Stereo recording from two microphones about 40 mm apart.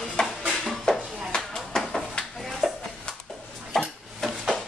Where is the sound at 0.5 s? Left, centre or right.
Centre.